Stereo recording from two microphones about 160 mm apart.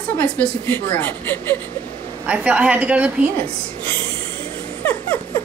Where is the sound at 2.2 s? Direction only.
5° right (ahead or behind).